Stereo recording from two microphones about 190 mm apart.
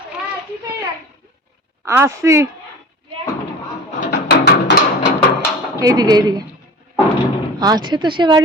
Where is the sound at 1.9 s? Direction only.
15° right (ahead or behind).